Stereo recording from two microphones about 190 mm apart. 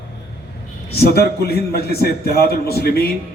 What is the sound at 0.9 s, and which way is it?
A man's voice, 55° left (ahead or behind).